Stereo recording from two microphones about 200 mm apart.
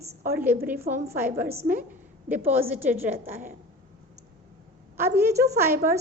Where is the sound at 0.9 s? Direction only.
40° right (ahead or behind).